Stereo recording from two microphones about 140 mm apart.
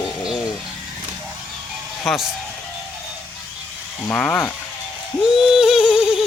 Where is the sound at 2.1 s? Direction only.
Centre (ahead or behind).